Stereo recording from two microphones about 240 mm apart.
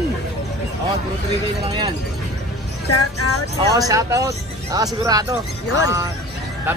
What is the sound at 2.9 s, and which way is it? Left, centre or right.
Speech, left.